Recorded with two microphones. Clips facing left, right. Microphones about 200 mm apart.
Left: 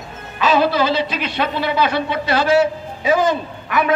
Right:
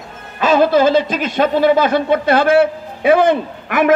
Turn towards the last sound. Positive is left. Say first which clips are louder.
# right 5 dB
turn(degrees=-50)  # may be behind; listen again after turning